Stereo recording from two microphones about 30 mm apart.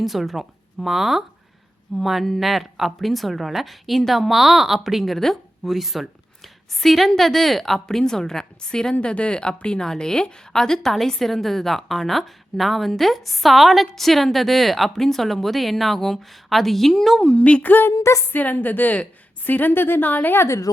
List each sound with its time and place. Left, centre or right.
0.0 s a woman's voice: centre
5.1 s speech: centre
5.6 s a woman's voice: centre
8.0 s a woman's voice: centre
9.0 s speech: left
9.8 s a woman's voice: centre
11.2 s a woman's voice: centre
17.3 s a sound: left
17.6 s a sound: left
18.3 s a woman's voice: left